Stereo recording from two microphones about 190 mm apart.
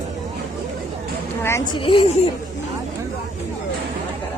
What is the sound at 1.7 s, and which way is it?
Speech, 25° left (ahead or behind).